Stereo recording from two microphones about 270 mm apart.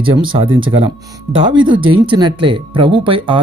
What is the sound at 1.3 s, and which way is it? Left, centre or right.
Speech, centre.